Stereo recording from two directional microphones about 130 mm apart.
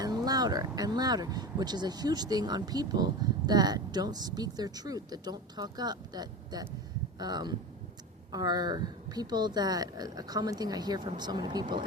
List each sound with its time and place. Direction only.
0.0 s speech: 30° right (ahead or behind)